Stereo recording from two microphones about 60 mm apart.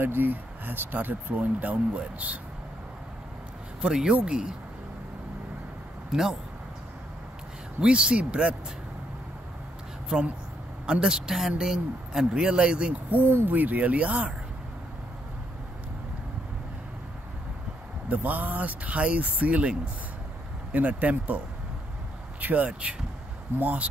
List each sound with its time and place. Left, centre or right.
0.0 s speech: right
3.8 s speech: centre
6.1 s speech: centre
7.8 s speech: centre
10.0 s speech: centre
13.5 s speech: right
18.0 s speech: right
22.4 s speech: right